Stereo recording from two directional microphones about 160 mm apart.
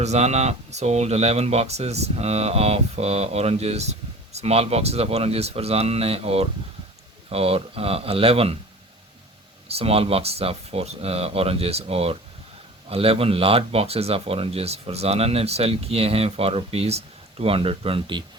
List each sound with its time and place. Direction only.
0.0 s speech: 45° right (ahead or behind)
9.6 s speech: 40° right (ahead or behind)